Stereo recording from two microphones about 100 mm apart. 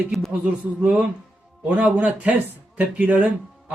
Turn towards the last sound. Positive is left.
turn(degrees=-15)  # may be behind; listen again after turning